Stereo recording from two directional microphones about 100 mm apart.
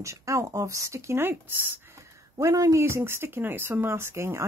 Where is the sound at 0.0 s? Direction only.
30° right (ahead or behind).